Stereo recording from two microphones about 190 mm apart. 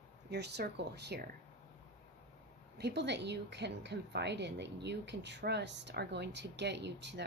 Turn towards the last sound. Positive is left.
turn(degrees=-65)  # may be behind; listen again after turning